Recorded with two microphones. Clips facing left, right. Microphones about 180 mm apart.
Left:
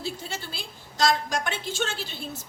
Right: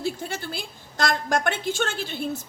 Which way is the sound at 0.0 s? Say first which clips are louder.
Right 5 dB; 55° right (ahead or behind).